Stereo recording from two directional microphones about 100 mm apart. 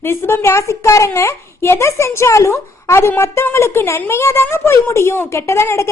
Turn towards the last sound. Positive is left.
turn(degrees=25)  # may be behind; listen again after turning